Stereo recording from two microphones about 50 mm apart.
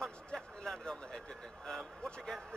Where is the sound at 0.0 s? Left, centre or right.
Centre.